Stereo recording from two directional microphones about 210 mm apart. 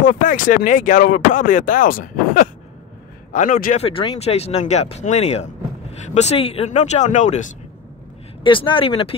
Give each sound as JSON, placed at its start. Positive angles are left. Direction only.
{"t": 0.0, "sound": "speech", "side_deg": 40}
{"t": 8.5, "sound": "speech", "side_deg": 25}